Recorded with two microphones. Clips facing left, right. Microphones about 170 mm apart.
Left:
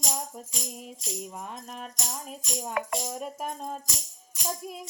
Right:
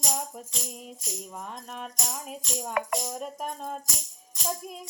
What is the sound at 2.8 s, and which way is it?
Music, 60° right (ahead or behind).